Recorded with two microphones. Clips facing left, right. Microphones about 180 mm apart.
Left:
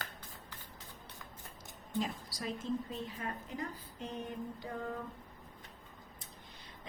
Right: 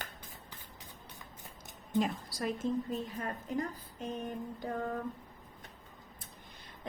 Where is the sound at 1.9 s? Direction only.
60° right (ahead or behind).